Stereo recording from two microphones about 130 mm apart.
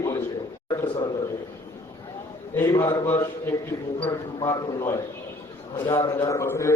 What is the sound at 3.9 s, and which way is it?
Speech, 45° left (ahead or behind).